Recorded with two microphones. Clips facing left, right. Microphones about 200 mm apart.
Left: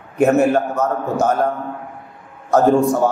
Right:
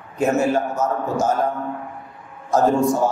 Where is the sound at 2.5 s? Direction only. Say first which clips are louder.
Left 3 dB; 60° left (ahead or behind).